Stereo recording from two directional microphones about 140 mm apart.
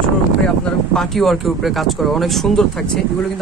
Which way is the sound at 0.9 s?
5° left (ahead or behind).